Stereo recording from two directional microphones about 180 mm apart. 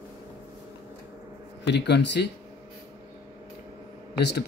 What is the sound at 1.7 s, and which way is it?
Speech, 70° left (ahead or behind).